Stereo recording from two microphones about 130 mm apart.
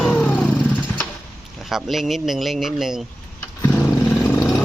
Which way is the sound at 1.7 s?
Centre (ahead or behind).